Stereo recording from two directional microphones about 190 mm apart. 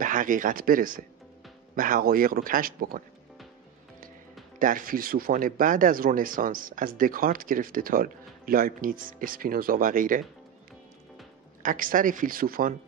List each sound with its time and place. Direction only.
0.0 s speech: 45° right (ahead or behind)
4.6 s speech: 45° right (ahead or behind)
11.6 s speech: 45° right (ahead or behind)